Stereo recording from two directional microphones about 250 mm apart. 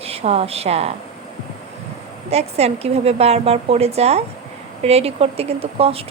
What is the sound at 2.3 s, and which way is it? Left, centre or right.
A woman's voice, right.